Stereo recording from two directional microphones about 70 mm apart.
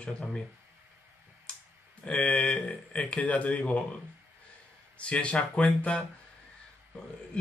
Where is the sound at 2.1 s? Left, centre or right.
Centre.